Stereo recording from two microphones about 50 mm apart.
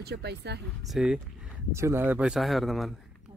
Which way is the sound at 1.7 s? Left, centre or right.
Right.